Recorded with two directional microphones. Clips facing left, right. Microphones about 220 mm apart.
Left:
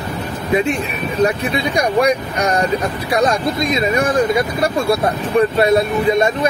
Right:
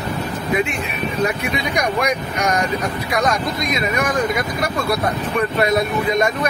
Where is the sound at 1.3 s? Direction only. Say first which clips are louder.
Left 3 dB; 30° left (ahead or behind).